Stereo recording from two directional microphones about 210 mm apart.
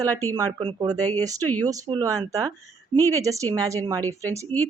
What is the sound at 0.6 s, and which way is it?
A woman's voice, 20° right (ahead or behind).